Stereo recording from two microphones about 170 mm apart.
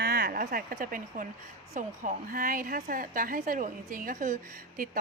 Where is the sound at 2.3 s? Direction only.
55° right (ahead or behind).